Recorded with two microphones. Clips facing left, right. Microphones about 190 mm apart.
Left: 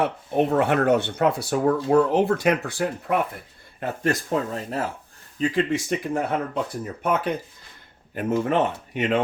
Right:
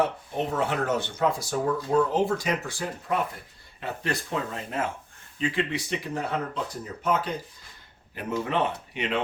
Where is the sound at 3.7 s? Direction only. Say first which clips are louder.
Left 6 dB; 45° left (ahead or behind).